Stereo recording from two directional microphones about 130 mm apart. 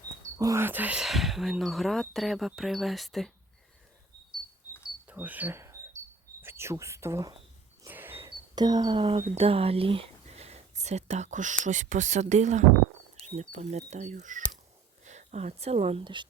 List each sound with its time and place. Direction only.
0.3 s speech: 25° right (ahead or behind); by 3.3 s centre (ahead or behind)
5.0 s speech: 15° right (ahead or behind)
7.9 s a sound: 15° right (ahead or behind)
8.5 s speech: 30° right (ahead or behind); by 14.4 s 75° right (ahead or behind)
15.0 s speech: 65° right (ahead or behind)